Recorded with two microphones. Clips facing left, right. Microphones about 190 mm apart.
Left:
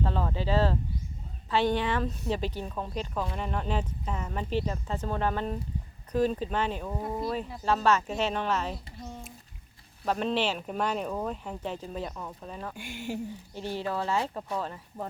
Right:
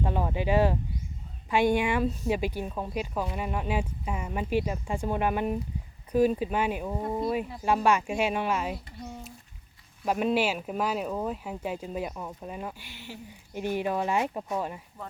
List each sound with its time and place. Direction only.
0.0 s speech: 15° right (ahead or behind)
12.7 s speech: 50° left (ahead or behind)
13.5 s speech: 15° right (ahead or behind)